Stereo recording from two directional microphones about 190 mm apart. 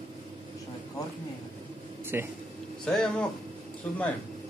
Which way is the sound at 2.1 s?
10° right (ahead or behind).